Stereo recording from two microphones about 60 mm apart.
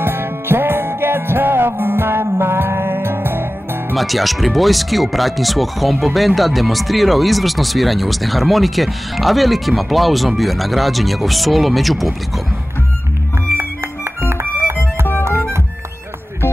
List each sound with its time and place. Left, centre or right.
0.0 s music: right
3.9 s speech: centre